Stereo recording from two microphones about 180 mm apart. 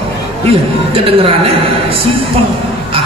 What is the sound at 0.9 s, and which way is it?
Speech, 30° right (ahead or behind).